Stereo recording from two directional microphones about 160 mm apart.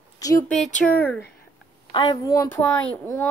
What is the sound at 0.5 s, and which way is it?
Speech, 5° left (ahead or behind).